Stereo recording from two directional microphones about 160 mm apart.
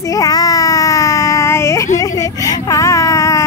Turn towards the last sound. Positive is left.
turn(degrees=20)  # may be behind; listen again after turning